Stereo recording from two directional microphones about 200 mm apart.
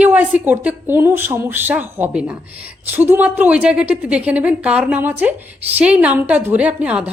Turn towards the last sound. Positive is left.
turn(degrees=-5)  # may be behind; listen again after turning